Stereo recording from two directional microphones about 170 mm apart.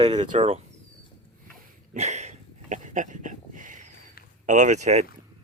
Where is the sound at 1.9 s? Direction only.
40° right (ahead or behind).